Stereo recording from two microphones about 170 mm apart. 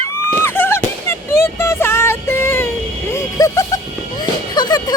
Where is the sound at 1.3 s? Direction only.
15° left (ahead or behind).